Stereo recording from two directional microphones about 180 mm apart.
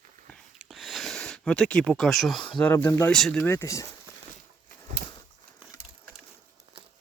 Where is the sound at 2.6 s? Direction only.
10° left (ahead or behind).